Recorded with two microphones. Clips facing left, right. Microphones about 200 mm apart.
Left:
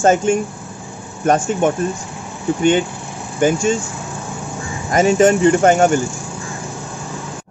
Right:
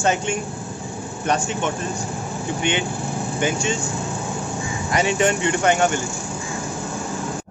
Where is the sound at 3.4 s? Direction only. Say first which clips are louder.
Left 8 dB; 45° left (ahead or behind).